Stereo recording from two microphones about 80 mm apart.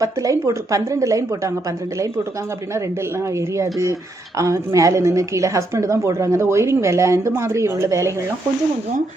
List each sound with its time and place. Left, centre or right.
0.0 s a woman's voice: right